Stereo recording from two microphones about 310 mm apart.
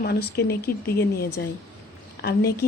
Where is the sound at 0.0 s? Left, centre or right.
Left.